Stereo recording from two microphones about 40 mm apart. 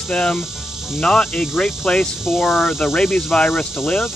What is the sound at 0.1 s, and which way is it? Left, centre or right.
Speech, centre.